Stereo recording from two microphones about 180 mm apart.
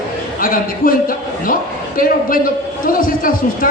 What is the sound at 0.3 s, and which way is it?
A man's voice, 50° left (ahead or behind).